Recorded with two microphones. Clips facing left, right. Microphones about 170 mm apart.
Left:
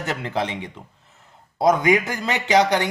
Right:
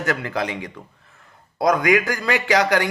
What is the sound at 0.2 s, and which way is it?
A man's voice, 20° left (ahead or behind).